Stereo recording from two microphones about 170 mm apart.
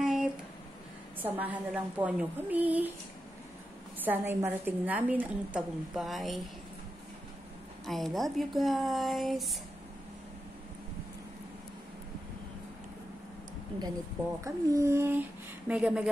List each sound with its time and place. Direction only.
0.0 s a sound: 5° right (ahead or behind)
1.2 s a woman's voice: 10° right (ahead or behind)
4.0 s a woman's voice: 10° right (ahead or behind)
7.8 s speech: centre (ahead or behind)
14.4 s a woman's voice: 15° right (ahead or behind)